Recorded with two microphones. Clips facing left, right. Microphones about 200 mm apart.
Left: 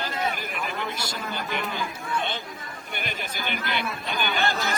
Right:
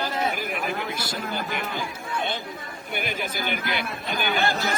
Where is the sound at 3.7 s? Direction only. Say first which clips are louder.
Right 1 dB; 45° right (ahead or behind).